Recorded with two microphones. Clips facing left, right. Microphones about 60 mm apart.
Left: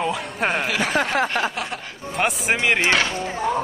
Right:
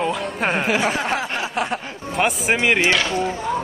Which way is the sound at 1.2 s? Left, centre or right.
Left.